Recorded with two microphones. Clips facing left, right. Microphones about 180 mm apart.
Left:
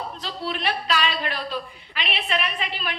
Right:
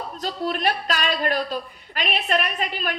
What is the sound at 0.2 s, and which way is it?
A woman's voice, 45° right (ahead or behind).